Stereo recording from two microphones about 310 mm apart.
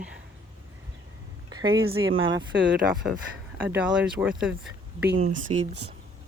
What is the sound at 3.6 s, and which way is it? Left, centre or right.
Speech, centre.